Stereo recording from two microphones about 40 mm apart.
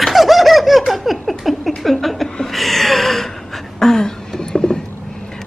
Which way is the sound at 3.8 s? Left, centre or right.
Centre.